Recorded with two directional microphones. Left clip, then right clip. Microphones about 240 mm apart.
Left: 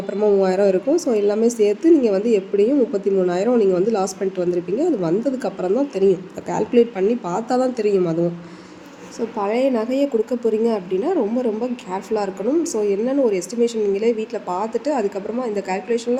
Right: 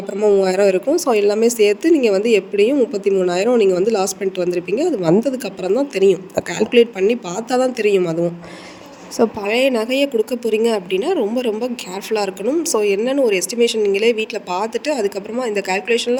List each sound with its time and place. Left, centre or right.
0.2 s speech: right